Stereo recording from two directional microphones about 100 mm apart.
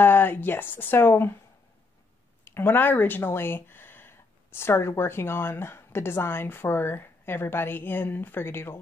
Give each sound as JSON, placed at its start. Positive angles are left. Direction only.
{"t": 0.0, "sound": "speech", "side_deg": 20}
{"t": 2.4, "sound": "speech", "side_deg": 20}